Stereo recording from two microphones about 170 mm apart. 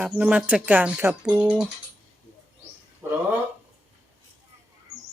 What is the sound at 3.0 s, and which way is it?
Speech, 10° right (ahead or behind).